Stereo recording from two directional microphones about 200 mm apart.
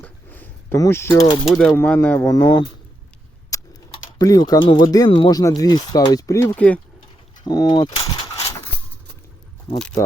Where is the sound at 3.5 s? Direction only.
15° left (ahead or behind).